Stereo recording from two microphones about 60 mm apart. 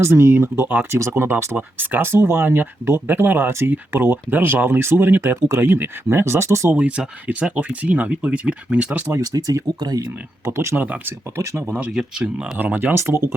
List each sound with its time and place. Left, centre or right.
0.0 s speech: right
0.9 s speech: right
1.5 s speech: right
6.8 s speech: centre
9.2 s speech: right
10.4 s speech: right
10.8 s speech: right
11.0 s speech: right
11.9 s speech: centre
12.5 s speech: right
12.9 s speech: right